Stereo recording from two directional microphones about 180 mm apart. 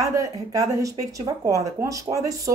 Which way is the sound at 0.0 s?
20° right (ahead or behind).